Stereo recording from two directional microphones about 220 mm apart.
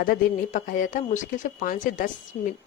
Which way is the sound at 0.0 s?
40° left (ahead or behind).